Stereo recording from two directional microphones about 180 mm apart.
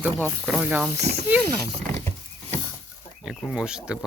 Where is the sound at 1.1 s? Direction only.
40° right (ahead or behind).